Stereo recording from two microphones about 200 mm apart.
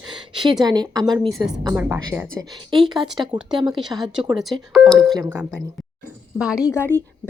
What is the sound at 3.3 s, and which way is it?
Speech, 25° right (ahead or behind).